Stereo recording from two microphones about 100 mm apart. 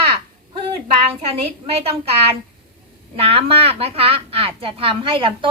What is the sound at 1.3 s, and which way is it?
A woman's voice, 80° right.